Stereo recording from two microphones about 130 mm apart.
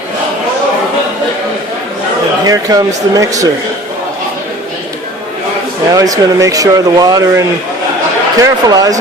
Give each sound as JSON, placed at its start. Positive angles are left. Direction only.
{"t": 2.5, "sound": "speech", "side_deg": -30}
{"t": 5.9, "sound": "speech", "side_deg": -25}